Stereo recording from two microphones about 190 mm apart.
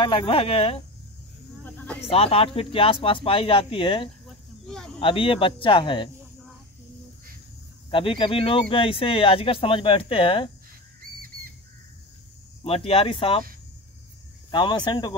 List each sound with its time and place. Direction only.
0.0 s speech: 30° left (ahead or behind)
1.6 s cricket: 10° left (ahead or behind)
2.0 s speech: 30° left (ahead or behind)
4.6 s speech: centre (ahead or behind)
5.0 s speech: 30° left (ahead or behind)
7.9 s speech: 30° left (ahead or behind)
12.6 s speech: 30° left (ahead or behind)
14.5 s speech: 25° left (ahead or behind)